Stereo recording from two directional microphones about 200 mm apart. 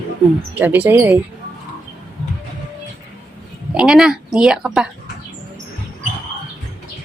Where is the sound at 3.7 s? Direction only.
5° right (ahead or behind).